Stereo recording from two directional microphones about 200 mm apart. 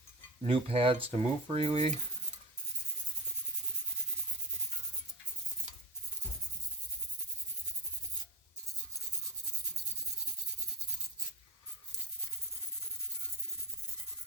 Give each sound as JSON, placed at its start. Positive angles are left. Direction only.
{"t": 0.4, "sound": "speech", "side_deg": -30}